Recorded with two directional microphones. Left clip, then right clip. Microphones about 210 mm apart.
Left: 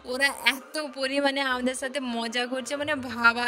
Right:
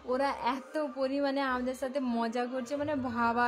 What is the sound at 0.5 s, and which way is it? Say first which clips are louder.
A woman's voice: left 6 dB; 40° left (ahead or behind).